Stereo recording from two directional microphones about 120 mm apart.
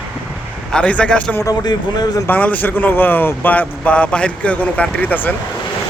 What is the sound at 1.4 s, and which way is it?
Speech, 35° left (ahead or behind).